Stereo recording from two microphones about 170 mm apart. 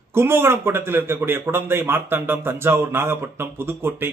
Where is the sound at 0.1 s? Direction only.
15° right (ahead or behind).